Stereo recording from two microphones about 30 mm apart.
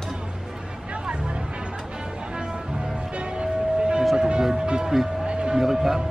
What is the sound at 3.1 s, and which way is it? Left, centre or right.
Music, right.